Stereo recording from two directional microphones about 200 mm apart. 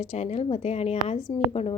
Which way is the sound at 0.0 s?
35° left (ahead or behind).